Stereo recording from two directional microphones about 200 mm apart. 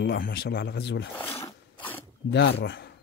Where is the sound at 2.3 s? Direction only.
55° left (ahead or behind).